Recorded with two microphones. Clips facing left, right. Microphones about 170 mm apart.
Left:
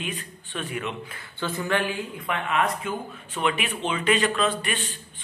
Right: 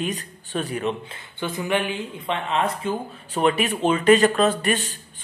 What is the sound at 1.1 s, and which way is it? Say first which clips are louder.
Speech: right 1 dB; 15° right (ahead or behind).